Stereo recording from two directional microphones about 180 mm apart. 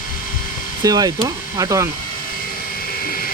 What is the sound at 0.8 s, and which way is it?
Speech, 20° right (ahead or behind).